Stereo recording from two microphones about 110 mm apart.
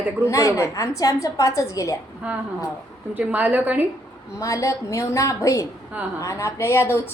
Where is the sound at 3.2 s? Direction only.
15° right (ahead or behind).